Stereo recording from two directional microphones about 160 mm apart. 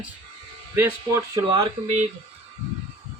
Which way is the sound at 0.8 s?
15° right (ahead or behind).